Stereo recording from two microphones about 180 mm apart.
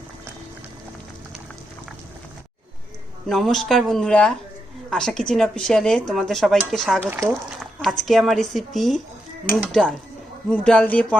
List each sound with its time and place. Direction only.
3.2 s speech: centre (ahead or behind)
7.0 s speech: 15° right (ahead or behind)
7.6 s speech: centre (ahead or behind)
10.5 s speech: 5° left (ahead or behind)